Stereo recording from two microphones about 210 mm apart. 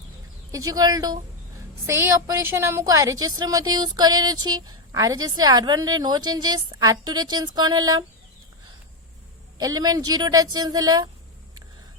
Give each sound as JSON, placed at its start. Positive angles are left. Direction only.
{"t": 0.5, "sound": "a woman's voice", "side_deg": -15}
{"t": 9.6, "sound": "a woman's voice", "side_deg": -20}